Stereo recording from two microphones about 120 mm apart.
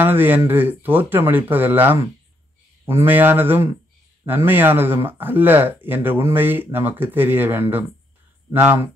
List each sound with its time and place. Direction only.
0.0 s speech: 15° right (ahead or behind)